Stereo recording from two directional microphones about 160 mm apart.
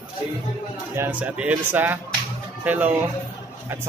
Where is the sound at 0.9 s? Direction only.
10° right (ahead or behind).